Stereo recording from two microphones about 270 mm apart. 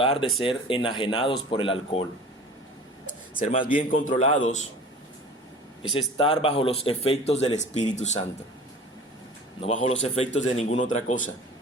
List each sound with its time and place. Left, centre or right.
0.0 s speech: centre
3.3 s speech: left
3.8 s a man's voice: left
5.9 s speech: centre
9.6 s speech: left